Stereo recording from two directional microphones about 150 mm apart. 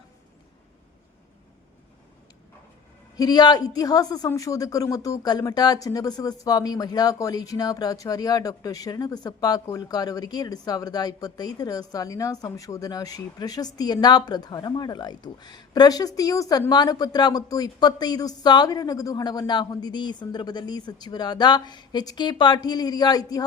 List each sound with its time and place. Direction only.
3.2 s speech: 25° left (ahead or behind)